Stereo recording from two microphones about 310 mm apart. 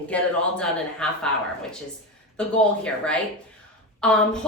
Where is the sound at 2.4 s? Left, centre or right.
Centre.